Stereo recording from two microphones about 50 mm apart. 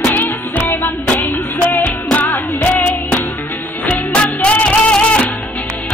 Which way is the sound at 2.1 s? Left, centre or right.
Left.